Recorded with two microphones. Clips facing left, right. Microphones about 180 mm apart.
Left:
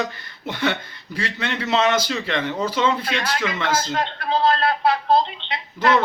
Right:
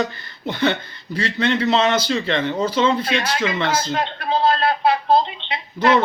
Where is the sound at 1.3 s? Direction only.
35° right (ahead or behind).